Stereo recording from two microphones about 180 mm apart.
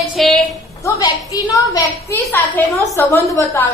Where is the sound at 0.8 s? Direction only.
20° left (ahead or behind).